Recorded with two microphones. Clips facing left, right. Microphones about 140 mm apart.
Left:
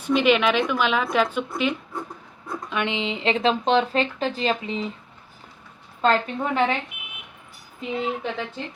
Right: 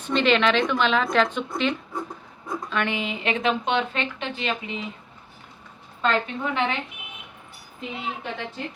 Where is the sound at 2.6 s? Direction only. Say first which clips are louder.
Left 1 dB; 15° left (ahead or behind); by 4.8 s 35° left (ahead or behind).